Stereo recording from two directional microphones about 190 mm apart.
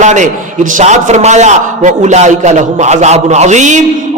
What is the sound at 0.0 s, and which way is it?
A man's voice, 40° right (ahead or behind).